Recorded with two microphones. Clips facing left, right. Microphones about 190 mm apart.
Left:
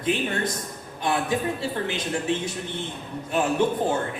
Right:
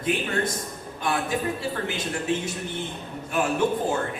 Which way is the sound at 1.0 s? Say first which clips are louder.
Left 2 dB; 25° left (ahead or behind).